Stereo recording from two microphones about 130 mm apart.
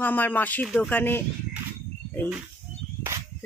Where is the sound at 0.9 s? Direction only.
15° left (ahead or behind).